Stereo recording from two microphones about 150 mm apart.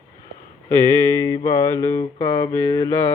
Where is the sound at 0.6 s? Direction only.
20° left (ahead or behind).